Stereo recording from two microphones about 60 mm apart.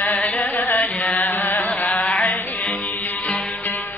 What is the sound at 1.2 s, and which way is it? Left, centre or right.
Chant, left.